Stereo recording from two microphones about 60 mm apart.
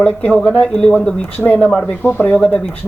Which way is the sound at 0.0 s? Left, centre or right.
Centre.